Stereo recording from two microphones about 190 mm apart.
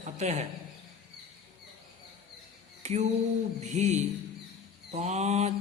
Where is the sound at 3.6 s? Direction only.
40° right (ahead or behind).